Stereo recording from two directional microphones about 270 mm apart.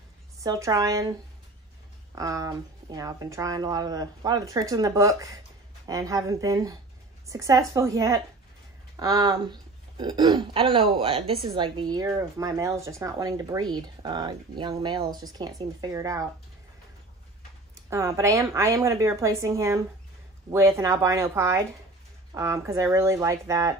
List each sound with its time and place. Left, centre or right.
0.4 s speech: centre
2.1 s speech: centre
17.8 s speech: centre